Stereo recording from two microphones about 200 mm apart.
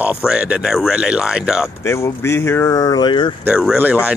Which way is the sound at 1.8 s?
15° left (ahead or behind).